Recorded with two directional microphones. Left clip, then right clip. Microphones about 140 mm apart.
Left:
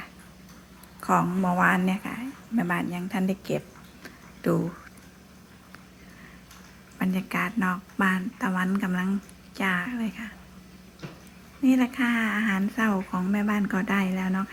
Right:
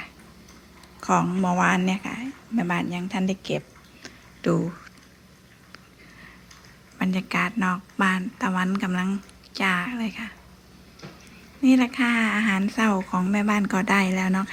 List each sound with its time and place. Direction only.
1.0 s a woman's voice: centre (ahead or behind)
4.0 s a sound: centre (ahead or behind)
7.0 s a woman's voice: 5° right (ahead or behind)
11.6 s speech: 5° right (ahead or behind); by 14.5 s 25° right (ahead or behind)